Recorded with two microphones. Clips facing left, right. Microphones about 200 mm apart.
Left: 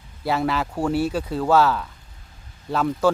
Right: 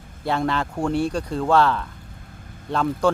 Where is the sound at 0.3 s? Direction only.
5° left (ahead or behind).